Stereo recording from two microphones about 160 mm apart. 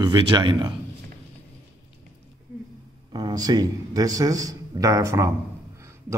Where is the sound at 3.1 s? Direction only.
25° right (ahead or behind).